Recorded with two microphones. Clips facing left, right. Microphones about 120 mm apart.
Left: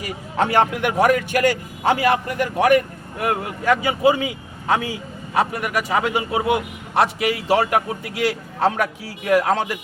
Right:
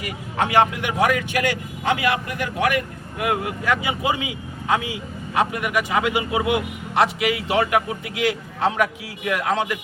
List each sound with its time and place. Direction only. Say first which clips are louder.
0.0 s speech: left 2 dB; 50° left (ahead or behind)